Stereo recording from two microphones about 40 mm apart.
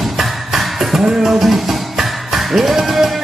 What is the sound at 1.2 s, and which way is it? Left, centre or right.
Music, centre.